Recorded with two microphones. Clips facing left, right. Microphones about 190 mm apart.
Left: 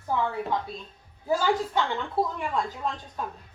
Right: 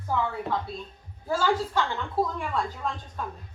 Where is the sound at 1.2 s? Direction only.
15° left (ahead or behind).